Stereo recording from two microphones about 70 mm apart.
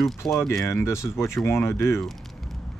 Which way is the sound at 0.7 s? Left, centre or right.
Left.